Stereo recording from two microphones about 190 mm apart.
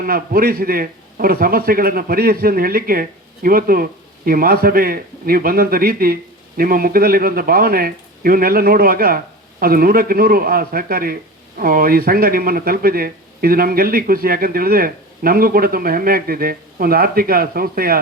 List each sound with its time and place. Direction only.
0.0 s speech: 50° right (ahead or behind)